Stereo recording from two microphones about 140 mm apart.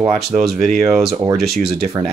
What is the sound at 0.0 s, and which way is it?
Speech, 5° right (ahead or behind).